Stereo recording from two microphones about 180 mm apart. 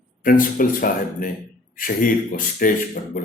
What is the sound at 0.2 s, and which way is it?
Speech, 50° left (ahead or behind).